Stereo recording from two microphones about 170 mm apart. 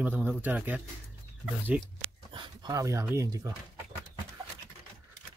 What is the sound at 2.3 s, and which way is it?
Speech, 25° right (ahead or behind).